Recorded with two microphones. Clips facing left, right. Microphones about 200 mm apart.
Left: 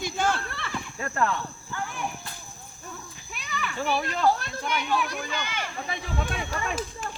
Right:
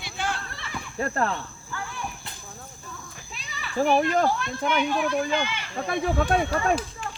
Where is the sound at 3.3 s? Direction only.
60° left (ahead or behind).